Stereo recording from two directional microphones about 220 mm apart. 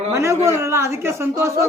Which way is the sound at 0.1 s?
15° right (ahead or behind).